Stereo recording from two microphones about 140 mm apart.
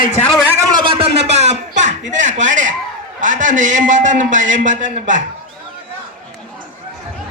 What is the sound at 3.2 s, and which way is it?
A man's voice, 65° right (ahead or behind).